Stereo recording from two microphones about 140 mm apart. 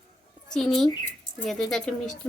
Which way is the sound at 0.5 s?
5° left (ahead or behind).